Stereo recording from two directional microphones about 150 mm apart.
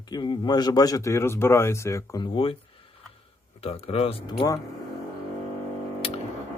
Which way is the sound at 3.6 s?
40° left (ahead or behind).